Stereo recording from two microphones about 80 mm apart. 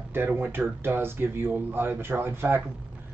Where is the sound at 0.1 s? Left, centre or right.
Right.